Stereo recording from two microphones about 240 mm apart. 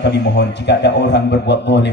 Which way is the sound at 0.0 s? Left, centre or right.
Left.